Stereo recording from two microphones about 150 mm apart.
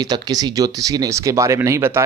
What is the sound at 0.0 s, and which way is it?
A man's voice, 25° right (ahead or behind).